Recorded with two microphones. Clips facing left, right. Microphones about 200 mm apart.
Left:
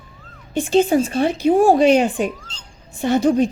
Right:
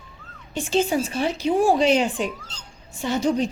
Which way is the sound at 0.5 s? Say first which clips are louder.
Left 6 dB; 55° left (ahead or behind).